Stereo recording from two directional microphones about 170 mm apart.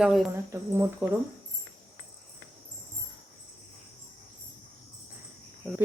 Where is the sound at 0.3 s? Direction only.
15° right (ahead or behind).